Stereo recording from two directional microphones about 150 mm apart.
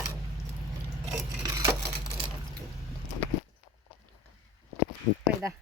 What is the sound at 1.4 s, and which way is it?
Wood, 20° right (ahead or behind).